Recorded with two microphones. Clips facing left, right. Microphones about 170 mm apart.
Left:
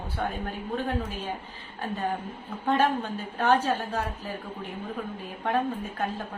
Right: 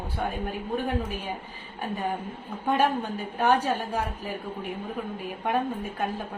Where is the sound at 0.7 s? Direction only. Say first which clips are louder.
Right 1 dB; 10° right (ahead or behind).